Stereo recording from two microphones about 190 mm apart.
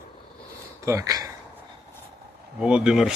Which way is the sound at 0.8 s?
15° right (ahead or behind).